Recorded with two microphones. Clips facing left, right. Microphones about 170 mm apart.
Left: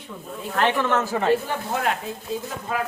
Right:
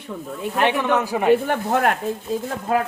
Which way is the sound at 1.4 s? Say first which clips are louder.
Right 5 dB; 60° right (ahead or behind).